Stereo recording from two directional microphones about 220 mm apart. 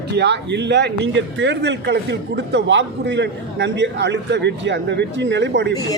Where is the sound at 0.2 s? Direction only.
50° right (ahead or behind).